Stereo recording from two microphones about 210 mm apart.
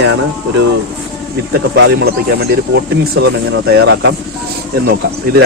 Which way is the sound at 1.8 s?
50° right (ahead or behind).